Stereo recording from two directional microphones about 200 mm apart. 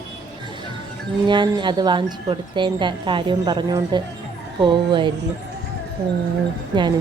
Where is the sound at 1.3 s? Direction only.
25° right (ahead or behind).